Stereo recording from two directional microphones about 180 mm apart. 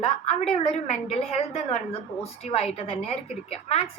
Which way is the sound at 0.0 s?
35° left (ahead or behind).